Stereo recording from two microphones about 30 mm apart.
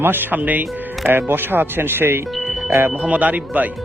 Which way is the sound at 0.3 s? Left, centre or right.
Right.